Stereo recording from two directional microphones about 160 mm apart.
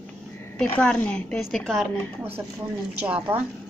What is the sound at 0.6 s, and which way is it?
A woman's voice, 5° left (ahead or behind).